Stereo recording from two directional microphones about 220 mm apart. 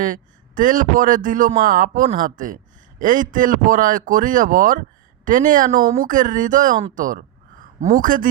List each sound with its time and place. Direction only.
0.0 s a man's voice: 35° right (ahead or behind)